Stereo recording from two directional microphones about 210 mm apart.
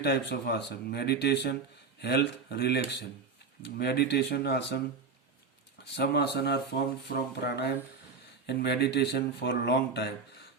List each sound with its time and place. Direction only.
0.0 s speech: 50° left (ahead or behind)
5.9 s speech: 55° left (ahead or behind)